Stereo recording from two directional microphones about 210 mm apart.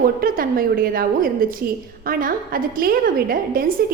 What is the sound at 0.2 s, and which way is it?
A woman's voice, 45° right (ahead or behind).